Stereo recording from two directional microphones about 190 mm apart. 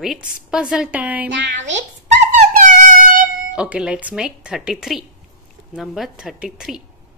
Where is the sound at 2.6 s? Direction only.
40° right (ahead or behind).